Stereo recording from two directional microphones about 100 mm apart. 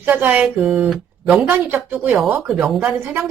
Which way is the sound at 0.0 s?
20° right (ahead or behind).